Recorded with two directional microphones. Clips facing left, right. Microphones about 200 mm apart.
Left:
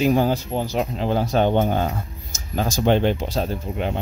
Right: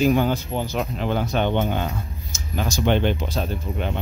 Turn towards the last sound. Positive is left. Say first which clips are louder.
# left 2 dB
turn(degrees=35)  # may be behind; listen again after turning